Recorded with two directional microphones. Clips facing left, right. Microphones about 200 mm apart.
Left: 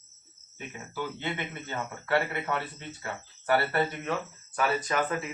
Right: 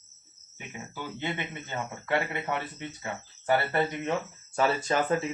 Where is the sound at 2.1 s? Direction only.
15° right (ahead or behind).